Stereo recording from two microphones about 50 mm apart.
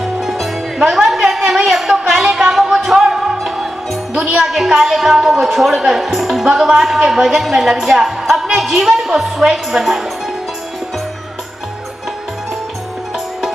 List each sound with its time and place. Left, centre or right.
0.0 s music: centre
1.5 s a sound: centre
4.1 s music: centre
4.4 s a woman's voice: centre